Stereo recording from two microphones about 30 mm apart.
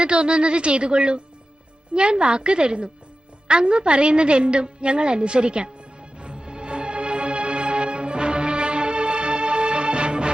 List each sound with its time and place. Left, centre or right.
0.0 s speech: right
3.4 s music: right